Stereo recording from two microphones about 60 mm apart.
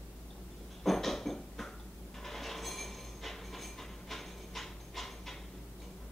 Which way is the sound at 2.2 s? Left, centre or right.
Centre.